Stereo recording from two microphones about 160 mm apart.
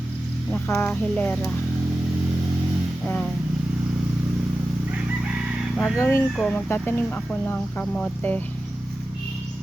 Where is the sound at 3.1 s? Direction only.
5° left (ahead or behind).